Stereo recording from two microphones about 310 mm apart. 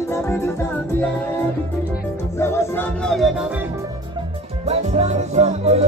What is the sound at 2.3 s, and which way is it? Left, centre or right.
Music, centre.